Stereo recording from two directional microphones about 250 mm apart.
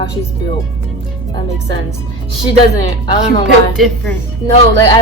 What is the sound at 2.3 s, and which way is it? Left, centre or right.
Speech, centre.